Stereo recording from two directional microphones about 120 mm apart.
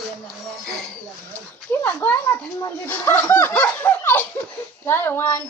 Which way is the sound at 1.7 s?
15° left (ahead or behind).